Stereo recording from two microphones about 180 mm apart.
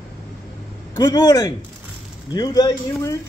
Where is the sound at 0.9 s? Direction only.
20° left (ahead or behind).